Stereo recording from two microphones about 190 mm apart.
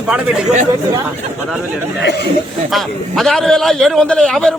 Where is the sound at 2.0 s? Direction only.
65° left (ahead or behind).